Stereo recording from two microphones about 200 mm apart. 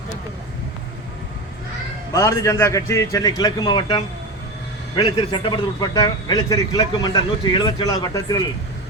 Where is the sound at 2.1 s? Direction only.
15° left (ahead or behind).